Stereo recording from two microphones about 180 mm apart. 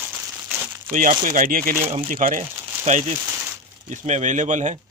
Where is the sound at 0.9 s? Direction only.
45° right (ahead or behind).